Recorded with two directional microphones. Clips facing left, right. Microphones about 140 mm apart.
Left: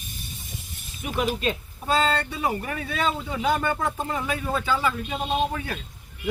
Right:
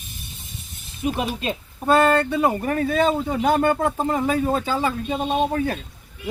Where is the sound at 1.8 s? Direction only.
55° right (ahead or behind).